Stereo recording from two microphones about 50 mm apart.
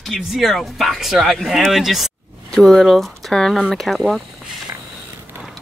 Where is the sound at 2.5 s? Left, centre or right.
Centre.